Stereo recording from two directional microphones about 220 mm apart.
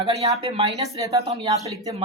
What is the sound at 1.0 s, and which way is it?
Speech, 15° right (ahead or behind).